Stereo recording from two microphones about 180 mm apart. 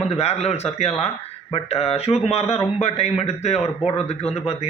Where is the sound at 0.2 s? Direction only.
35° left (ahead or behind).